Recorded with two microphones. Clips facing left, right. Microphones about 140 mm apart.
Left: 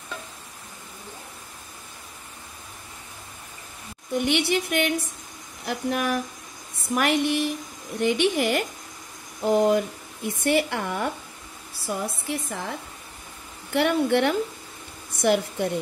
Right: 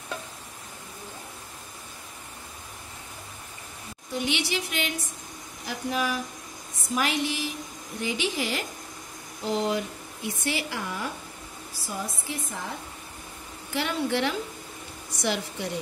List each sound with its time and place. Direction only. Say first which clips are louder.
4.1 s speech: left 6 dB; 55° left (ahead or behind)
12.3 s speech: left 5 dB; 65° left (ahead or behind)
13.7 s a woman's voice: left 6 dB; 55° left (ahead or behind)